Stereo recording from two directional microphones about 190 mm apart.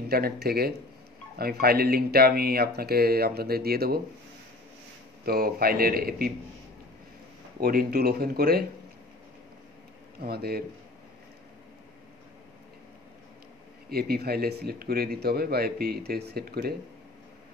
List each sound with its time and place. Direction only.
0.1 s speech: 55° right (ahead or behind)
5.2 s a man's voice: 50° right (ahead or behind)
7.6 s a man's voice: 50° right (ahead or behind)
10.2 s speech: 55° right (ahead or behind)
13.8 s speech: 55° right (ahead or behind)